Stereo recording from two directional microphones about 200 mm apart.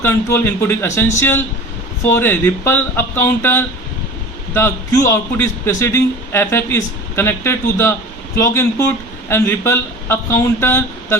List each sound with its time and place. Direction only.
0.0 s a man's voice: 10° left (ahead or behind)